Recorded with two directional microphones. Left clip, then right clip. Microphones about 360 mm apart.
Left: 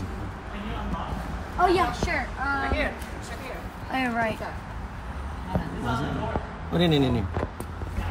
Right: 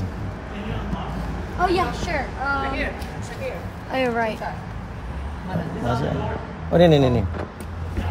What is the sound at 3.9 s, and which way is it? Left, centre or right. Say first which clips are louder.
Speech: right 4 dB; centre.